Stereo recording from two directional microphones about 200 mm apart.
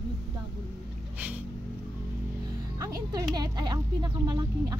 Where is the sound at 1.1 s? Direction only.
5° right (ahead or behind).